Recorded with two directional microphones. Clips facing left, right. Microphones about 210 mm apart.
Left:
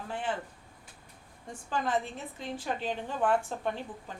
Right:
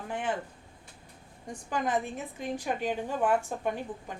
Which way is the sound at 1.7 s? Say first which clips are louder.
Right 1 dB; 15° right (ahead or behind).